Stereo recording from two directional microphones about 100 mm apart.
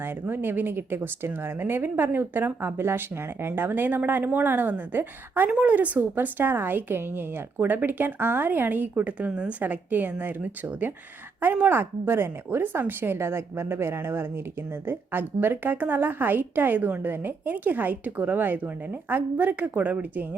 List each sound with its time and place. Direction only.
0.0 s a woman's voice: 20° right (ahead or behind)